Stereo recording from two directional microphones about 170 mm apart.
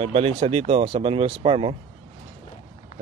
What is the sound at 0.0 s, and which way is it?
Speech, 35° right (ahead or behind).